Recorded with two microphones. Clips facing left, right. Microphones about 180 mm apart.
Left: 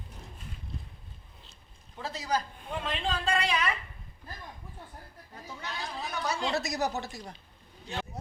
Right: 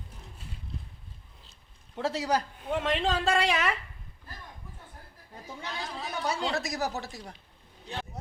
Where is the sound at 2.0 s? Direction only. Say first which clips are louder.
Right 4 dB; 75° right (ahead or behind).